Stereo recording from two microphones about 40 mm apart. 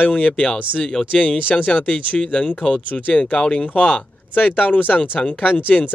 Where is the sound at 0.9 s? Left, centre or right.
Centre.